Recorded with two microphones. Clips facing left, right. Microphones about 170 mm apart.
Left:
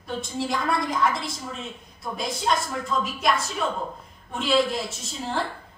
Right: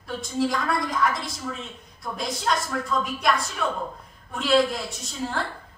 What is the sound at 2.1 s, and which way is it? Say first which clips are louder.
Speech: left 1 dB; 5° left (ahead or behind).